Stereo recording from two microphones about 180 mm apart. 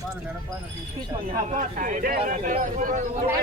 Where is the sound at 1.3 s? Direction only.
45° right (ahead or behind).